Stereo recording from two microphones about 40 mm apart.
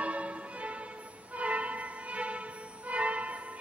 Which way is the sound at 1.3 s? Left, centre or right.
Right.